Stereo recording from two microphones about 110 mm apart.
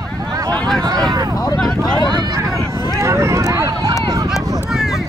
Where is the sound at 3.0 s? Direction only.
25° right (ahead or behind).